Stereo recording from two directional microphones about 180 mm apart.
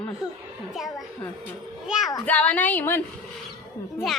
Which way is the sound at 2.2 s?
5° left (ahead or behind).